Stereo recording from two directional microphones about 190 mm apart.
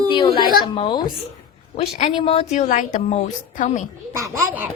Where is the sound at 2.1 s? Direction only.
30° left (ahead or behind).